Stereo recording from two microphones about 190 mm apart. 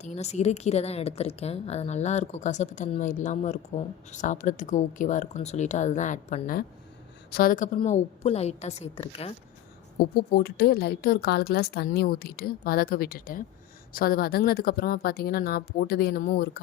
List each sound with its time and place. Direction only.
0.0 s a woman's voice: 35° left (ahead or behind)
10.0 s a woman's voice: 55° left (ahead or behind)